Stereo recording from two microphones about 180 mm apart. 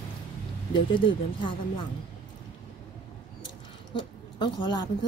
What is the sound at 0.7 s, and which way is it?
Speech, 25° left (ahead or behind).